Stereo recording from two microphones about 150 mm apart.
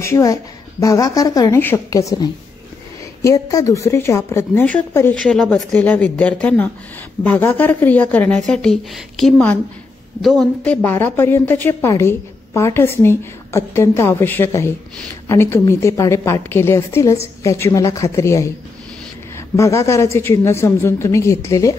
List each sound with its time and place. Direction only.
0.0 s a woman's voice: 20° left (ahead or behind)